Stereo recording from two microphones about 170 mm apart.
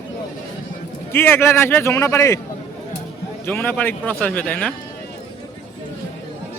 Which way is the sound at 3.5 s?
10° left (ahead or behind).